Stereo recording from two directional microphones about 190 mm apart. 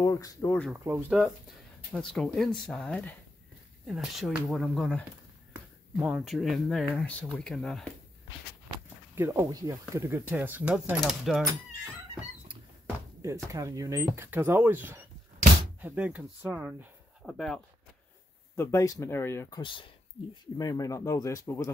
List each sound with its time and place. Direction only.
0.0 s speech: 20° left (ahead or behind)
0.8 s speech: 15° right (ahead or behind)
1.9 s speech: 5° left (ahead or behind)
6.0 s speech: centre (ahead or behind)
9.1 s speech: 15° right (ahead or behind)
13.2 s speech: 15° right (ahead or behind); by 17.6 s centre (ahead or behind)
18.6 s speech: 15° left (ahead or behind)
19.6 s speech: 25° left (ahead or behind)